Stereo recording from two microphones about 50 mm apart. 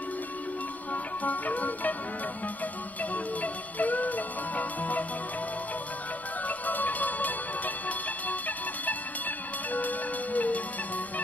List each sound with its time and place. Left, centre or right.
1.2 s music: left
3.0 s music: left
6.4 s music: left